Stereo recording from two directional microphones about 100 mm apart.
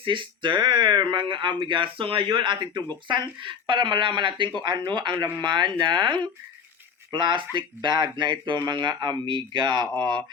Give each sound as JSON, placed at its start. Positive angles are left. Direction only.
{"t": 0.0, "sound": "speech", "side_deg": -55}